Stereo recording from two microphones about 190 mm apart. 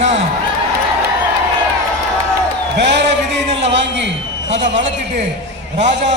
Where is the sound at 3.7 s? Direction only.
70° right (ahead or behind).